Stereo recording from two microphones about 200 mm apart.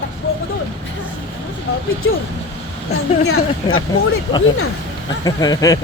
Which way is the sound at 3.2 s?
90° left.